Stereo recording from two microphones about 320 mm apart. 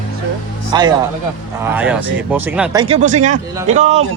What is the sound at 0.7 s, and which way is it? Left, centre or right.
Speech, centre.